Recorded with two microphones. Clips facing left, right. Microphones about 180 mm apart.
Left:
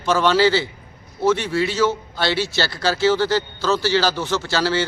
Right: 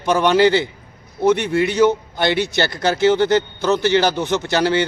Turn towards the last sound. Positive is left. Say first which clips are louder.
# right 3 dB
turn(degrees=-20)  # may be behind; listen again after turning